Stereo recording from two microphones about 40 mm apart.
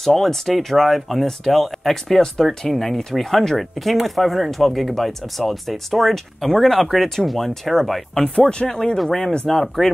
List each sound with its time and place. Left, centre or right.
0.0 s speech: centre
8.4 s speech: left
8.9 s speech: centre